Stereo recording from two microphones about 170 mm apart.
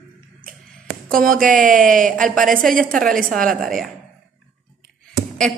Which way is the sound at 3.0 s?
Centre (ahead or behind).